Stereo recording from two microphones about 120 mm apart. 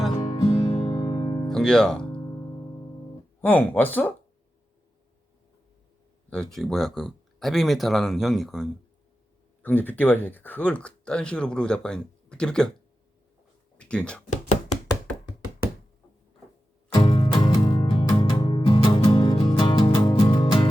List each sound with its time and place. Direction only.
0.4 s music: 35° left (ahead or behind)
1.5 s music: 5° left (ahead or behind)
3.4 s speech: 15° left (ahead or behind)
6.3 s speech: 5° left (ahead or behind)
9.6 s speech: 15° left (ahead or behind)
13.7 s a sound: 10° left (ahead or behind)
16.9 s music: 40° left (ahead or behind)
19.9 s music: 30° left (ahead or behind)
20.4 s music: 40° left (ahead or behind)